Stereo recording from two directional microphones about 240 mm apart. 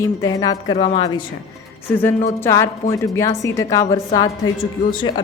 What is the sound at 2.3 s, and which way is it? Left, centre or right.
A woman's voice, centre.